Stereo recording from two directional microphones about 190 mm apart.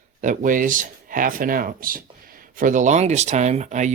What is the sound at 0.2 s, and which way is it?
Speech, 45° right (ahead or behind).